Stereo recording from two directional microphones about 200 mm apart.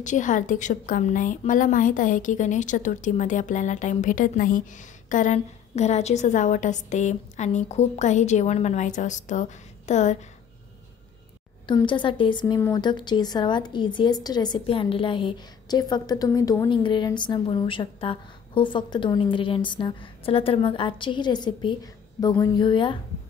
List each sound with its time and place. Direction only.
0.0 s a woman's voice: 40° left (ahead or behind)
11.6 s a woman's voice: 25° left (ahead or behind)